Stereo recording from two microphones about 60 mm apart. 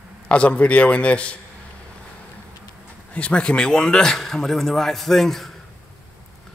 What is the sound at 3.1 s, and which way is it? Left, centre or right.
Speech, left.